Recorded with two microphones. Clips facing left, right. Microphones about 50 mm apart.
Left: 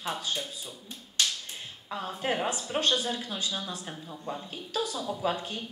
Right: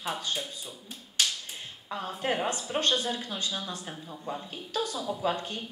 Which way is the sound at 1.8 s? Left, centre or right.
Centre.